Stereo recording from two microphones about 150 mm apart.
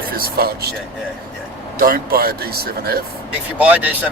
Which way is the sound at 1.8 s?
75° right (ahead or behind).